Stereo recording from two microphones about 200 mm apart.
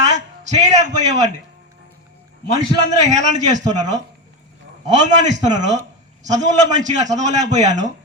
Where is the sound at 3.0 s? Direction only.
35° right (ahead or behind).